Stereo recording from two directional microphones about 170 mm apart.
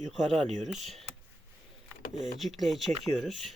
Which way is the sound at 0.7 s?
Centre (ahead or behind).